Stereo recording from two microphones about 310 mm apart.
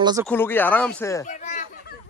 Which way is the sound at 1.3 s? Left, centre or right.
Left.